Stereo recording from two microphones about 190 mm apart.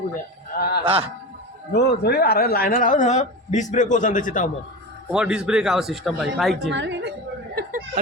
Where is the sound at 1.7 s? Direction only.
60° left (ahead or behind); by 4.4 s 40° left (ahead or behind).